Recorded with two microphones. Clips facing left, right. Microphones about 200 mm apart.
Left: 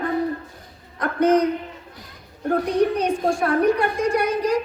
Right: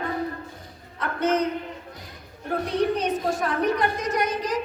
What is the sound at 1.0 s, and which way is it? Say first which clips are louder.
Speech: left 6 dB; 10° left (ahead or behind).